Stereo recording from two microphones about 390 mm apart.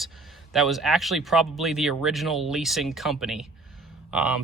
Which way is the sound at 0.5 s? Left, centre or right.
Centre.